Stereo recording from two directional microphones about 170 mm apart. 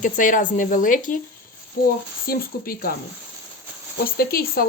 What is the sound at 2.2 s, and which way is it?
Speech, 60° left (ahead or behind).